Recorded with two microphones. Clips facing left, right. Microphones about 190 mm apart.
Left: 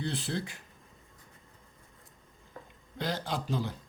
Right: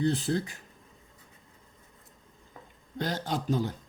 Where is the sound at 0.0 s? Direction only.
45° right (ahead or behind).